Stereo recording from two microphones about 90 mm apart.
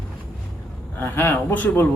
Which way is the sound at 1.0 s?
25° left (ahead or behind).